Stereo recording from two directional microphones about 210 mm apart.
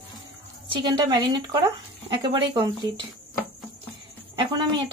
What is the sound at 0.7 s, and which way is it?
Speech, 20° right (ahead or behind).